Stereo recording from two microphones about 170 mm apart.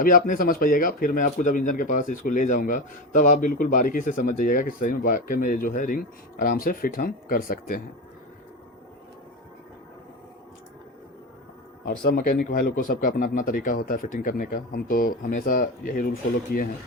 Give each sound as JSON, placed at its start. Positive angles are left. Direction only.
{"t": 0.0, "sound": "a man's voice", "side_deg": 55}
{"t": 12.0, "sound": "speech", "side_deg": 60}